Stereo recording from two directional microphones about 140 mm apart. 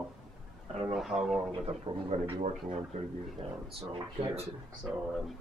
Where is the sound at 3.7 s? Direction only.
40° right (ahead or behind).